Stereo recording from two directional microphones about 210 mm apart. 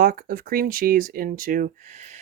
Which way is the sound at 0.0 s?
45° right (ahead or behind).